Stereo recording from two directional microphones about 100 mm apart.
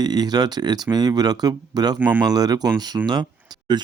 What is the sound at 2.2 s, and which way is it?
Speech, 40° right (ahead or behind).